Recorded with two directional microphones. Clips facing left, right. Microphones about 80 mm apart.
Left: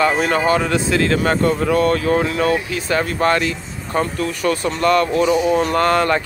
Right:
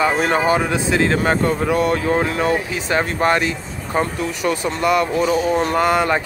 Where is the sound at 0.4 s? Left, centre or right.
Centre.